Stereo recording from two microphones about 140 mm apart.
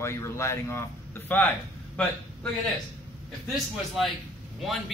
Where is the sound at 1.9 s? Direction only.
10° left (ahead or behind).